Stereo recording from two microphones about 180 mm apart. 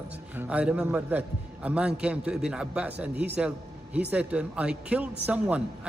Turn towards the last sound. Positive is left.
turn(degrees=-10)  # may be behind; listen again after turning